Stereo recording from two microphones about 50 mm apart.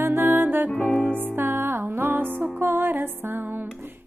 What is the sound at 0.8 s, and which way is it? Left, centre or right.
Music, left.